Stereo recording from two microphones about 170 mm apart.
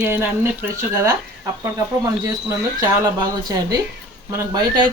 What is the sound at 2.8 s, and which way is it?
Speech, 20° right (ahead or behind).